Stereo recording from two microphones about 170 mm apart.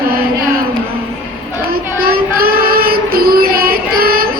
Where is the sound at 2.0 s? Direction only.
60° right (ahead or behind).